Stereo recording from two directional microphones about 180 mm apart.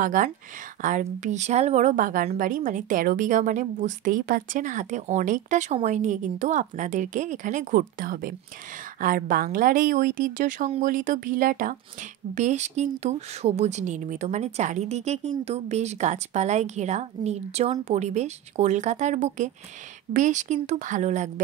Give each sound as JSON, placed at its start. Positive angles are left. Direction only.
{"t": 0.0, "sound": "a woman's voice", "side_deg": -45}